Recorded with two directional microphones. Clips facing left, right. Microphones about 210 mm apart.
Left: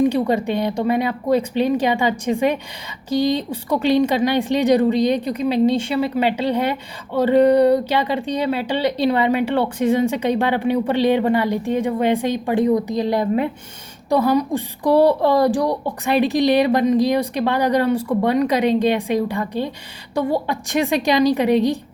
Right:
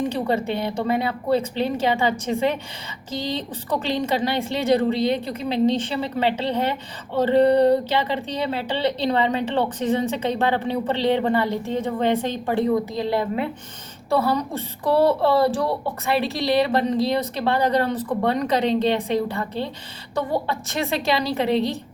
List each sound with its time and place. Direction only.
0.1 s a woman's voice: 15° left (ahead or behind)